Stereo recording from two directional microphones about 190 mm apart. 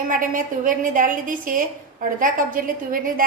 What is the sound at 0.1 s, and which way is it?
A woman's voice, 45° right (ahead or behind).